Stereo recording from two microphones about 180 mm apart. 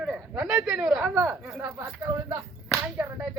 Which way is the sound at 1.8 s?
20° right (ahead or behind).